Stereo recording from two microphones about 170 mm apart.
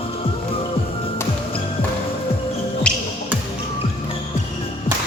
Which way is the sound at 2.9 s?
5° left (ahead or behind).